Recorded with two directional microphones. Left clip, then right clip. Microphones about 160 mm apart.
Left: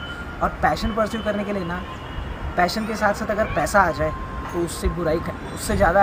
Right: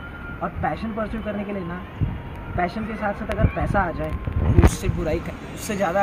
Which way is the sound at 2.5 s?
15° left (ahead or behind).